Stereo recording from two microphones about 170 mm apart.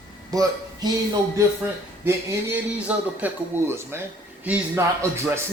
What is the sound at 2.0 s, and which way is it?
Speech, 10° right (ahead or behind).